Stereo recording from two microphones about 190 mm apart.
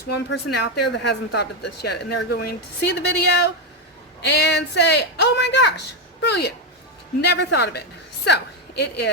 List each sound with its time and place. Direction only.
0.3 s a woman's voice: 60° left (ahead or behind)